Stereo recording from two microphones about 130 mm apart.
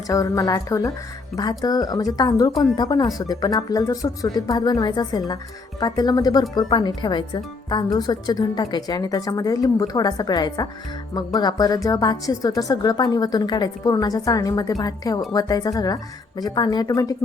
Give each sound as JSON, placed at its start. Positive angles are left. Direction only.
{"t": 0.1, "sound": "a woman's voice", "side_deg": 25}